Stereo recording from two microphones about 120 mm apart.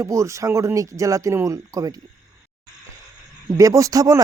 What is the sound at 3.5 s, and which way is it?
Speech, 30° right (ahead or behind).